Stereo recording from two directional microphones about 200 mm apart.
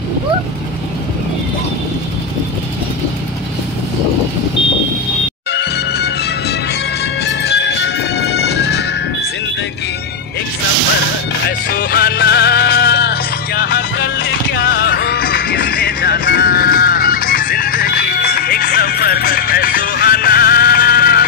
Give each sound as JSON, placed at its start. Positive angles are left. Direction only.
{"t": 5.5, "sound": "music", "side_deg": 55}
{"t": 7.2, "sound": "music", "side_deg": 55}
{"t": 11.4, "sound": "music", "side_deg": 50}